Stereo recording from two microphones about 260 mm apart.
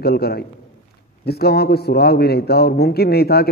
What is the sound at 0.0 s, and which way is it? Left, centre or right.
A man's voice, left.